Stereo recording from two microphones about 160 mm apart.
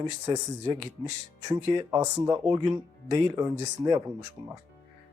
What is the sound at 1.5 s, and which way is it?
Speech, 20° right (ahead or behind).